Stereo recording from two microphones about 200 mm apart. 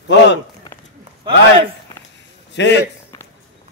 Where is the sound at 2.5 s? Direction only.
60° left (ahead or behind).